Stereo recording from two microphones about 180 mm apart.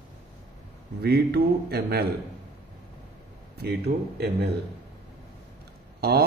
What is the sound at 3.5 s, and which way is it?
Speech, 65° right (ahead or behind).